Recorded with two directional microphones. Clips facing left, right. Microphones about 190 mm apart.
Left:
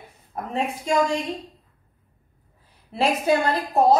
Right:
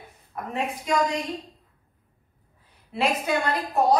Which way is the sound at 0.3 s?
30° left (ahead or behind).